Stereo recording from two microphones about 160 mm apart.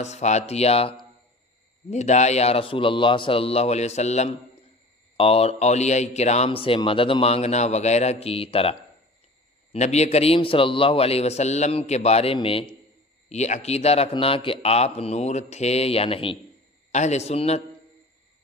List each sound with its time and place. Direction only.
0.0 s speech: 45° left (ahead or behind)